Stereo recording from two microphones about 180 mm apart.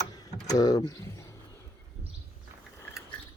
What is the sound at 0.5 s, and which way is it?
Speech, 20° left (ahead or behind).